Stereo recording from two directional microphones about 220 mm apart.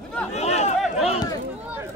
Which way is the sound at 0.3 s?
30° left (ahead or behind).